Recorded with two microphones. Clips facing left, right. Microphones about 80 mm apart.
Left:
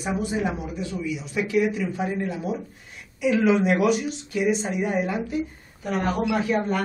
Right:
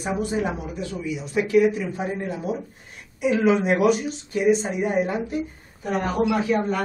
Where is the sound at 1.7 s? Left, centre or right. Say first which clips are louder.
Right 1 dB; right.